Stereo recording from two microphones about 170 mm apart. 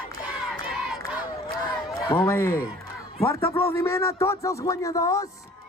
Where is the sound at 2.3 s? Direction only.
15° left (ahead or behind).